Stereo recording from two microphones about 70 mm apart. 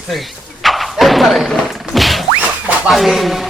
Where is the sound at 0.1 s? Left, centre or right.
Centre.